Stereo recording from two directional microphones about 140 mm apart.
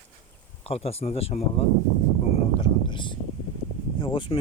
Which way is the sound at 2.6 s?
35° left (ahead or behind).